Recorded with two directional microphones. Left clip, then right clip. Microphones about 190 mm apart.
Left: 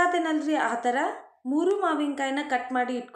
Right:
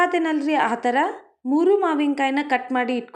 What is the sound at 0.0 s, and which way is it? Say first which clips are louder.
A woman's voice: right 4 dB; 40° right (ahead or behind).